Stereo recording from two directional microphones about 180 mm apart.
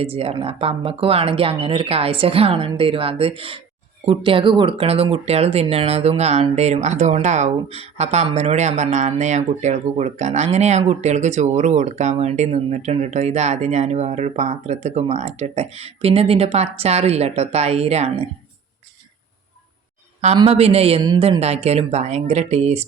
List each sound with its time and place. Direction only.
0.0 s speech: 30° right (ahead or behind)
20.2 s speech: 35° right (ahead or behind)